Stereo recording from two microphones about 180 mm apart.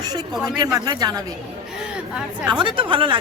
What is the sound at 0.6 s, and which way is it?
Speech, 20° right (ahead or behind).